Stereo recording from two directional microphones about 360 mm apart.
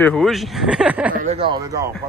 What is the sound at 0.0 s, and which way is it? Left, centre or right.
Speech, centre.